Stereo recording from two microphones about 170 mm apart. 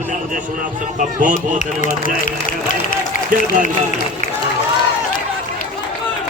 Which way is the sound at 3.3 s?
50° right (ahead or behind).